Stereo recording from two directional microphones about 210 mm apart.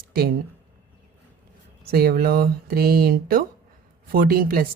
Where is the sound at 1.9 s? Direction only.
45° right (ahead or behind).